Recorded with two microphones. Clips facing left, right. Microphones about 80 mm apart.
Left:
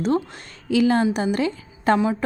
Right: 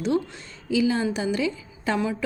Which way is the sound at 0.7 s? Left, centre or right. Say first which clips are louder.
Left 4 dB; left.